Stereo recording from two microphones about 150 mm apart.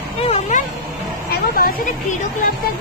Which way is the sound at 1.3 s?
75° left (ahead or behind).